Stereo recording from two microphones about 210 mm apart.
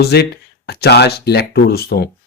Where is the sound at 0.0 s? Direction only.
50° left (ahead or behind).